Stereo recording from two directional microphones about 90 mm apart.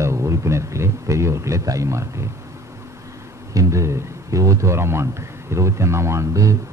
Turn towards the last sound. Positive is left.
turn(degrees=-40)  # may be behind; listen again after turning